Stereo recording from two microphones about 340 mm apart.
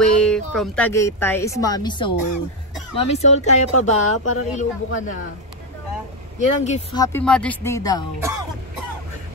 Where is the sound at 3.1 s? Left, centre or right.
Centre.